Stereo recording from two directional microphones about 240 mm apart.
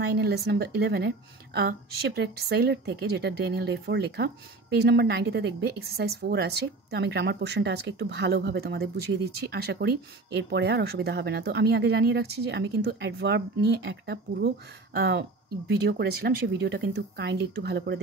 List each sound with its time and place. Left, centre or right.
0.0 s a woman's voice: right